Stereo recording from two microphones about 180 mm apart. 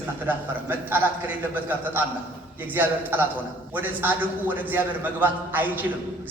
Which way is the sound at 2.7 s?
10° right (ahead or behind).